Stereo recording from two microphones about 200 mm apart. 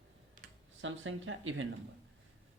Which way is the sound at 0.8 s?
75° right (ahead or behind).